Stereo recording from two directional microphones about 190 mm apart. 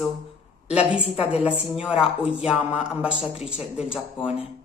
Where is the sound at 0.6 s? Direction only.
5° right (ahead or behind).